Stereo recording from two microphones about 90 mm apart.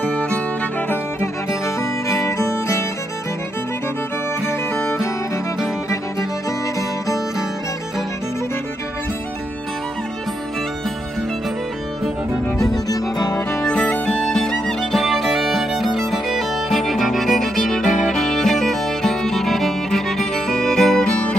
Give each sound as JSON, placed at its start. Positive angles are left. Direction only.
{"t": 0.0, "sound": "music", "side_deg": 15}
{"t": 2.0, "sound": "music", "side_deg": 35}
{"t": 12.9, "sound": "music", "side_deg": 45}
{"t": 13.5, "sound": "music", "side_deg": 15}